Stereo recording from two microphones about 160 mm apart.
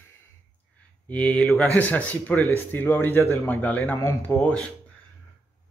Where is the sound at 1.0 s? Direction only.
10° left (ahead or behind).